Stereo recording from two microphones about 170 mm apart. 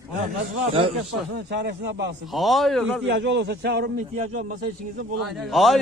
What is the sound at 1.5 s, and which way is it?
Speech, 90° right.